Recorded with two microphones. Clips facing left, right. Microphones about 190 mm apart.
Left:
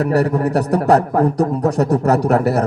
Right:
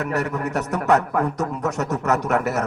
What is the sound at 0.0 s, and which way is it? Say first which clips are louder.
A man's voice: left 8 dB; 35° left (ahead or behind).